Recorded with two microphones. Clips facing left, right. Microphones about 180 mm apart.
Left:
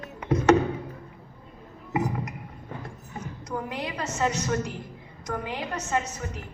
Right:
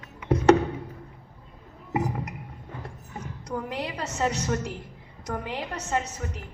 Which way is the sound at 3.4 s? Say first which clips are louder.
Right 1 dB; 35° right (ahead or behind).